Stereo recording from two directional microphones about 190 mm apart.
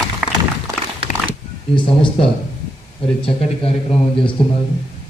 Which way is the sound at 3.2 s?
30° left (ahead or behind).